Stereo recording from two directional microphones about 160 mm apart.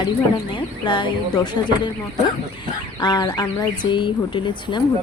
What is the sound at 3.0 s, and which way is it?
Speech, 25° left (ahead or behind).